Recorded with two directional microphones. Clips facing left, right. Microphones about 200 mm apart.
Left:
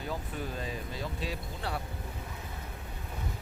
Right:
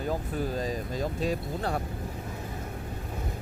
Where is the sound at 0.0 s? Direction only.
40° right (ahead or behind).